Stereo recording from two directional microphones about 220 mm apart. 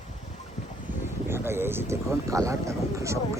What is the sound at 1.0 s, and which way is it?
Speech, 10° right (ahead or behind).